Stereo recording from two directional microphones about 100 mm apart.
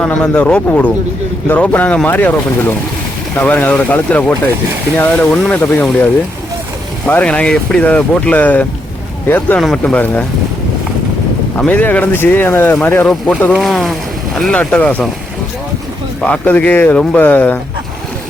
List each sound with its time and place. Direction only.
0.0 s speech: 15° left (ahead or behind)
7.1 s speech: 15° left (ahead or behind)
11.5 s speech: 15° left (ahead or behind)
13.6 s speech: centre (ahead or behind)
16.2 s speech: 15° left (ahead or behind)